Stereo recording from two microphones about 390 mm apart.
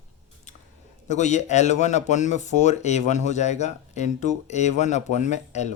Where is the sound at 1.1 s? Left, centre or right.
Centre.